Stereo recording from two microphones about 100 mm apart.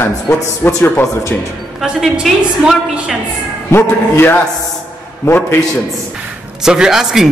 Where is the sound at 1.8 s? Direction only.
5° right (ahead or behind).